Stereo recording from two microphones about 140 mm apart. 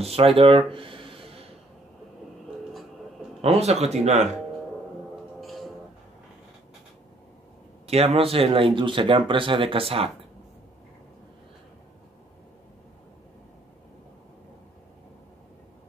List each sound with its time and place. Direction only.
0.0 s a sound: 45° right (ahead or behind)
3.4 s speech: 50° right (ahead or behind)
5.4 s music: centre (ahead or behind)
7.8 s speech: 45° right (ahead or behind)